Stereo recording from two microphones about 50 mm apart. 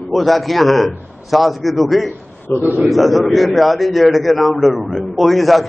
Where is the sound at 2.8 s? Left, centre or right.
Centre.